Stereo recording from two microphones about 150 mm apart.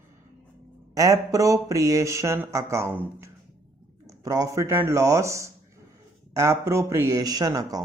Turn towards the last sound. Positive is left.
turn(degrees=-25)  # may be behind; listen again after turning